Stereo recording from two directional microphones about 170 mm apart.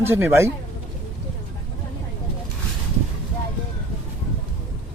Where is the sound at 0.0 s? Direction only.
15° right (ahead or behind).